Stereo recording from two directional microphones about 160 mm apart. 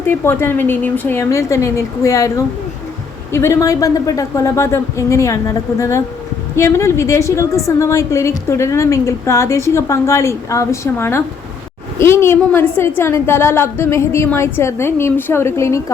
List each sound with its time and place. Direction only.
0.0 s a woman's voice: 15° left (ahead or behind)